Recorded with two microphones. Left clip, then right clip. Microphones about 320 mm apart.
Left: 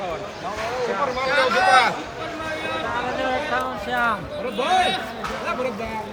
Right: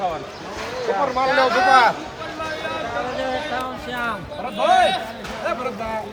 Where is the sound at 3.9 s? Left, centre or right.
Centre.